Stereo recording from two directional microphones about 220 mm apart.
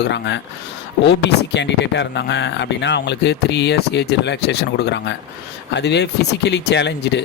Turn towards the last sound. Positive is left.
turn(degrees=50)  # may be behind; listen again after turning